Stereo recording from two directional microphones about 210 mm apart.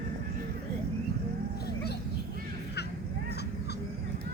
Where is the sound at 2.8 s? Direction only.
50° left (ahead or behind).